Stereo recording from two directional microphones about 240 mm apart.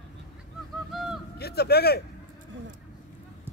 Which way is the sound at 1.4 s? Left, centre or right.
Left.